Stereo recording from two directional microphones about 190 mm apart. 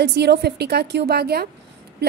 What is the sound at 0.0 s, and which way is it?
A woman's voice, 60° right (ahead or behind).